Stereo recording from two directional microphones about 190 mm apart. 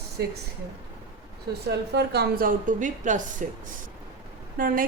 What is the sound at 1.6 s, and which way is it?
Speech, 60° right (ahead or behind).